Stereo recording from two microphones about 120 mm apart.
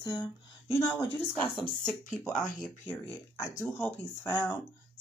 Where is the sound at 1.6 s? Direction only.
5° left (ahead or behind).